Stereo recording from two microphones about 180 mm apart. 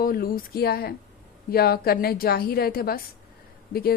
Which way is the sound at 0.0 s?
55° left (ahead or behind).